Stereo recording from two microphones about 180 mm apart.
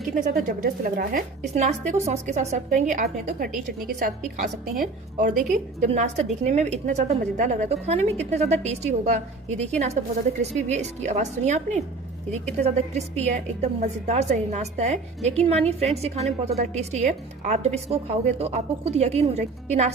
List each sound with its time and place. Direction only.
0.1 s a woman's voice: 50° right (ahead or behind)
3.8 s a woman's voice: 55° right (ahead or behind); by 19.9 s 40° right (ahead or behind)